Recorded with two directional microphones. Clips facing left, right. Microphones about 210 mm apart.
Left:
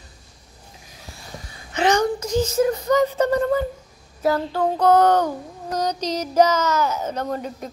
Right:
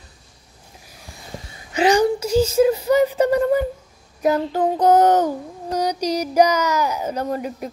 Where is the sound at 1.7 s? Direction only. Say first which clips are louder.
Right 3 dB; 10° right (ahead or behind).